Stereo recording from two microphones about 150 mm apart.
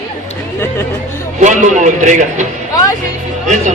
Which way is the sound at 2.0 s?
55° right (ahead or behind).